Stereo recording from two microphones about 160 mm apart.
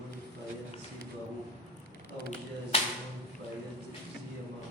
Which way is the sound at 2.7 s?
35° left (ahead or behind).